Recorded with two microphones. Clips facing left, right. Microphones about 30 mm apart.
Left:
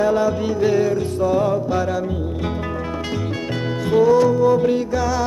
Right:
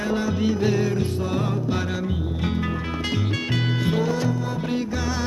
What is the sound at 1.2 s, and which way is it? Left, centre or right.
Music, centre.